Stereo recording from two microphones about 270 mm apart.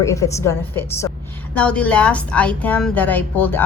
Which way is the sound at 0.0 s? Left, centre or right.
Centre.